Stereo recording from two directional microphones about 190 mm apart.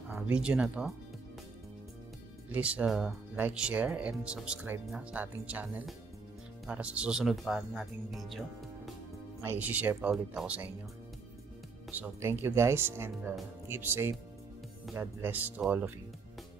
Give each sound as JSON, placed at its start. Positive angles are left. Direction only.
{"t": 0.1, "sound": "speech", "side_deg": -5}
{"t": 2.5, "sound": "speech", "side_deg": -5}
{"t": 9.4, "sound": "speech", "side_deg": -10}
{"t": 11.9, "sound": "speech", "side_deg": -10}